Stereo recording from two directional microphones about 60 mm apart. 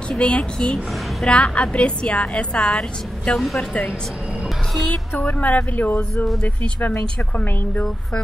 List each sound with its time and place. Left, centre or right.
0.2 s a woman's voice: centre
3.3 s speech: centre
5.1 s a woman's voice: left
6.1 s speech: centre
6.4 s a woman's voice: left